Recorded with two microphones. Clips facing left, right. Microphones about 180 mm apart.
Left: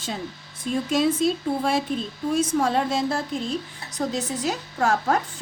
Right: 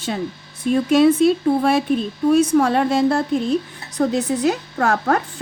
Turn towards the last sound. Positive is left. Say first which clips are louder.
# right 3 dB
turn(degrees=-60)  # may be behind; listen again after turning